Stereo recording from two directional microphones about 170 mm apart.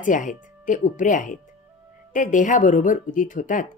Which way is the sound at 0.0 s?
50° left (ahead or behind).